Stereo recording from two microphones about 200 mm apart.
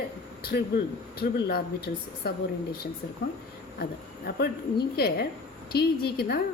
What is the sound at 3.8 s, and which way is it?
A woman's voice, 50° left (ahead or behind).